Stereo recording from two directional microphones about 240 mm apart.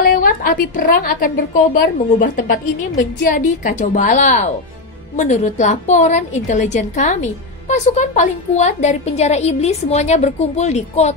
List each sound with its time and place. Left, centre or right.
0.0 s a woman's voice: left